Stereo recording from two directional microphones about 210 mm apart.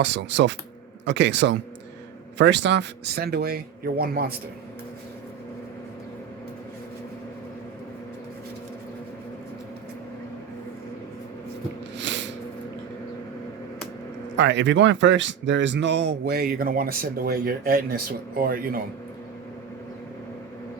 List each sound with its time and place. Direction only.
0.0 s speech: 55° right (ahead or behind)
11.9 s a sound: 60° right (ahead or behind)
14.3 s speech: 55° right (ahead or behind)